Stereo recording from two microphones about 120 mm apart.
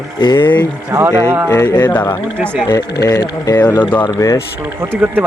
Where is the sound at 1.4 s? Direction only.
30° left (ahead or behind).